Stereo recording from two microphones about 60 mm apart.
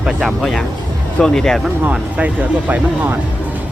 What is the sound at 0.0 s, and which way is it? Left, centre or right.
Speech, centre.